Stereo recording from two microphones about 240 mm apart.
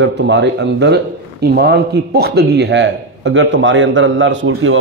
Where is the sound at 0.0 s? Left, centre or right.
Right.